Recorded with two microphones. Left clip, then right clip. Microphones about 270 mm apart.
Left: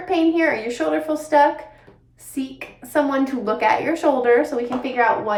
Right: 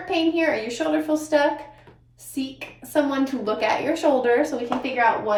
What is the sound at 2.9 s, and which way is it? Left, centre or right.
Speech, centre.